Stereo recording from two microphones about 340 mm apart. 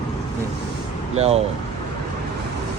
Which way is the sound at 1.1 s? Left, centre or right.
Centre.